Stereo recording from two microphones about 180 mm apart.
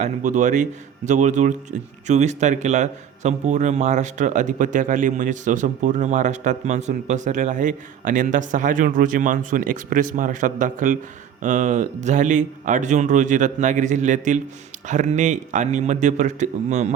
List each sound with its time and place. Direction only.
0.0 s a man's voice: 40° right (ahead or behind)